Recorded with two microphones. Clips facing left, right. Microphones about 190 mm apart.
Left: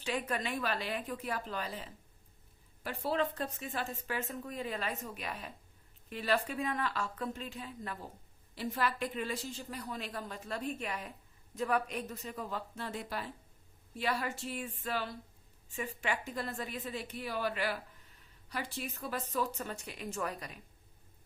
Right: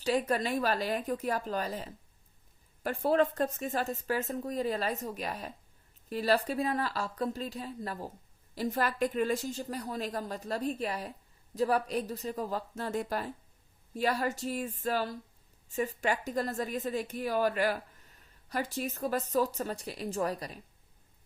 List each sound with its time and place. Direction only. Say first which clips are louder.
0.0 s a woman's voice: right 7 dB; 40° right (ahead or behind)